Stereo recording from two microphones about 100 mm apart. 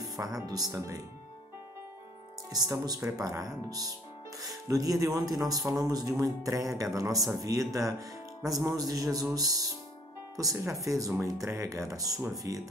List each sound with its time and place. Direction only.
0.0 s speech: 35° right (ahead or behind)
2.5 s speech: 40° right (ahead or behind)